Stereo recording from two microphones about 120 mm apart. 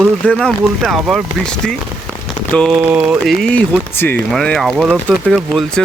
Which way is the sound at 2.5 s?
10° left (ahead or behind).